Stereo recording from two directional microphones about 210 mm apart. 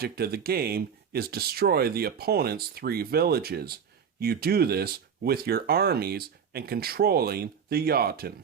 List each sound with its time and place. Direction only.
0.0 s speech: 45° right (ahead or behind)